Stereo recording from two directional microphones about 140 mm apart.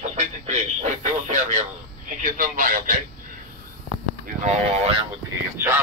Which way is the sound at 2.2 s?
75° right (ahead or behind).